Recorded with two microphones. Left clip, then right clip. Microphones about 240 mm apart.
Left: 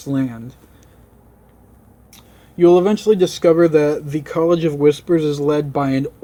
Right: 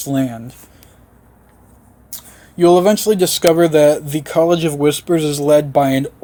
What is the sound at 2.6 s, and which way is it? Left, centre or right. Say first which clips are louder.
Speech: right 2 dB; right.